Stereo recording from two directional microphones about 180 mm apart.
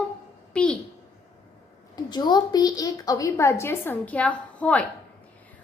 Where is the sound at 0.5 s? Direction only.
5° left (ahead or behind).